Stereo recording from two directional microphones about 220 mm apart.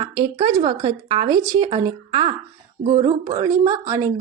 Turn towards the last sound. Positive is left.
turn(degrees=-15)  # may be behind; listen again after turning